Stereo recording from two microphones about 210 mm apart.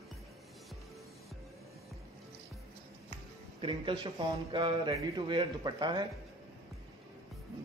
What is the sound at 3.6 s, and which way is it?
A man's voice, 20° right (ahead or behind).